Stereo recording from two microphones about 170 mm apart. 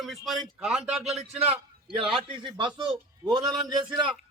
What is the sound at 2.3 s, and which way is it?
A man's voice, 30° right (ahead or behind).